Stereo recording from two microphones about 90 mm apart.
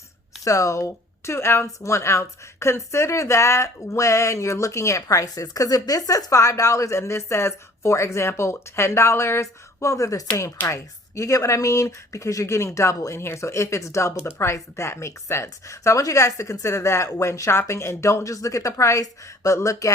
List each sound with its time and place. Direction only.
0.4 s a woman's voice: 40° left (ahead or behind)